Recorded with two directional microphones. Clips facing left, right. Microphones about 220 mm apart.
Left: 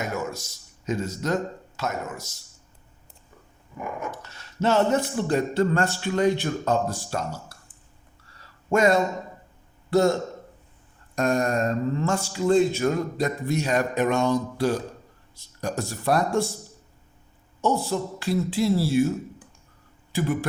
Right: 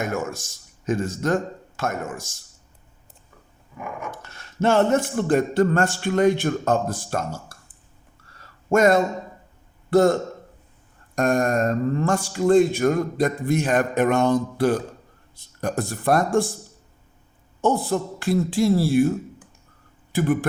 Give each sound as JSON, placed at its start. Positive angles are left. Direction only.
{"t": 0.0, "sound": "speech", "side_deg": -50}
{"t": 4.2, "sound": "speech", "side_deg": -50}
{"t": 8.4, "sound": "a sound", "side_deg": -50}
{"t": 9.9, "sound": "speech", "side_deg": -50}
{"t": 17.6, "sound": "speech", "side_deg": -55}